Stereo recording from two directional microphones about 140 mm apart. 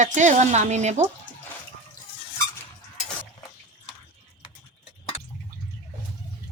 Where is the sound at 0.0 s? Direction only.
60° right (ahead or behind).